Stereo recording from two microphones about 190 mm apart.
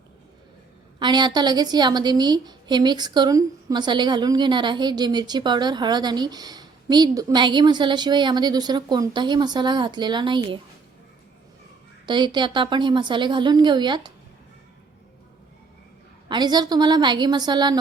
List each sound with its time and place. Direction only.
0.9 s a woman's voice: 25° right (ahead or behind)
12.0 s a woman's voice: 25° right (ahead or behind)
16.3 s a woman's voice: 20° right (ahead or behind)